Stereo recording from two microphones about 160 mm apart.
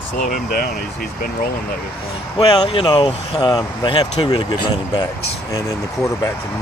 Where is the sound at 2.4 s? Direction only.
35° left (ahead or behind).